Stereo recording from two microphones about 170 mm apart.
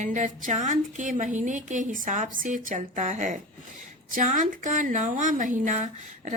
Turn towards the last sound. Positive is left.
turn(degrees=-45)  # may be behind; listen again after turning